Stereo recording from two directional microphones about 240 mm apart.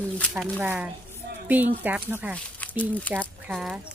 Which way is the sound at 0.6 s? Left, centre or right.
Centre.